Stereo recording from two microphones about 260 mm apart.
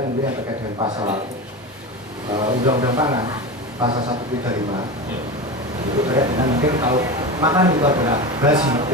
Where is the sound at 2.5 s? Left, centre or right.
Centre.